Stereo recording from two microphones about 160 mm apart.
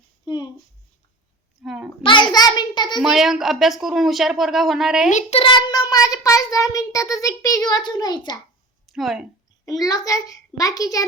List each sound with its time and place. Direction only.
0.3 s a child's voice: 25° left (ahead or behind)
1.6 s a sound: 5° right (ahead or behind)
2.3 s a child's voice: 25° left (ahead or behind)
3.0 s speech: centre (ahead or behind)
5.1 s a child's voice: 40° left (ahead or behind)
5.5 s a child's voice: 30° left (ahead or behind)
8.9 s a woman's voice: centre (ahead or behind)
9.6 s a child's voice: 20° left (ahead or behind)